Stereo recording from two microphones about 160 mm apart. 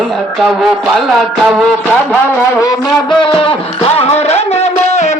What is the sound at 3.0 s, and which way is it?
Music, 30° left (ahead or behind).